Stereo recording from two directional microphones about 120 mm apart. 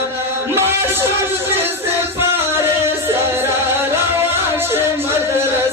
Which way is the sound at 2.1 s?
20° right (ahead or behind).